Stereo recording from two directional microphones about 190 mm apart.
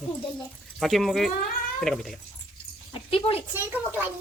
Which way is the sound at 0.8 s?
Centre (ahead or behind).